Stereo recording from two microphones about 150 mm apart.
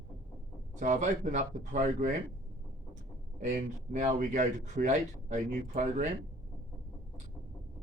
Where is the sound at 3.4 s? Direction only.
55° right (ahead or behind).